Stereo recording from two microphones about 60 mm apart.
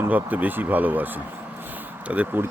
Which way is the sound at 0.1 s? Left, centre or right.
Right.